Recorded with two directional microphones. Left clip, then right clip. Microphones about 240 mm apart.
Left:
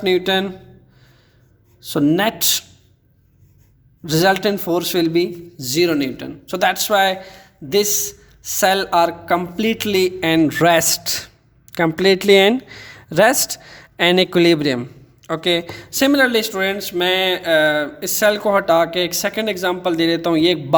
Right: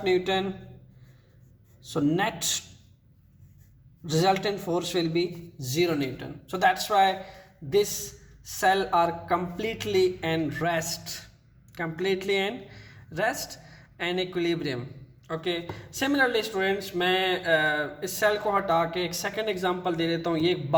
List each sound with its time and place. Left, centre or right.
0.0 s speech: left
1.9 s speech: left
4.0 s speech: left